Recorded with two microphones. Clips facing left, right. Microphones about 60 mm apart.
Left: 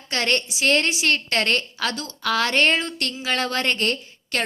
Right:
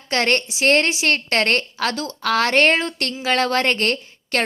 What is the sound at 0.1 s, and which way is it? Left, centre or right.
A woman's voice, right.